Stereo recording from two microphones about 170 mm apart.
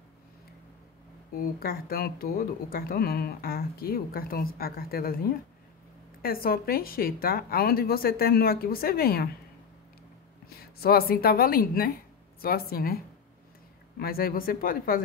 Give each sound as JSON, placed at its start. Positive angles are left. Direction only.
{"t": 1.3, "sound": "speech", "side_deg": 60}
{"t": 10.6, "sound": "a woman's voice", "side_deg": 65}